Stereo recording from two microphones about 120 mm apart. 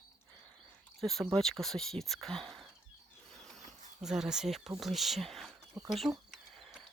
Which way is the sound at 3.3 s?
5° left (ahead or behind).